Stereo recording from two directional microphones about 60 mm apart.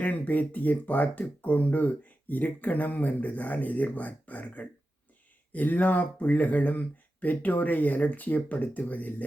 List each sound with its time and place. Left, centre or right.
0.0 s speech: left